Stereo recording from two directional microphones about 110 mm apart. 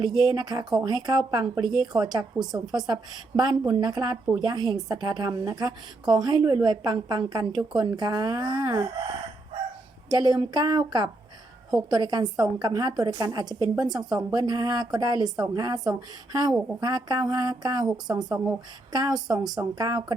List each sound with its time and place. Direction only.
0.0 s a woman's voice: 40° right (ahead or behind)
2.3 s a woman's voice: 10° right (ahead or behind)
2.7 s a woman's voice: 40° right (ahead or behind)
10.1 s a woman's voice: 40° right (ahead or behind)